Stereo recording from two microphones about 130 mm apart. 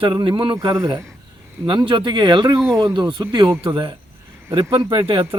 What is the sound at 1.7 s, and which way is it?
Speech, 40° right (ahead or behind).